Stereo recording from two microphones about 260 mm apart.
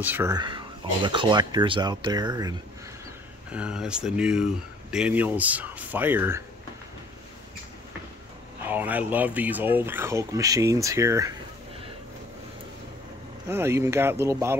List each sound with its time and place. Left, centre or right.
0.0 s speech: centre
3.5 s speech: centre
8.6 s speech: centre
13.5 s speech: centre